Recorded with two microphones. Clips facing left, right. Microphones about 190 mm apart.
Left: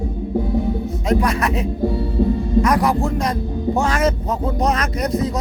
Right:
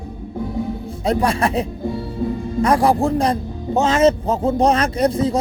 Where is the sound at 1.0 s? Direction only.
30° right (ahead or behind).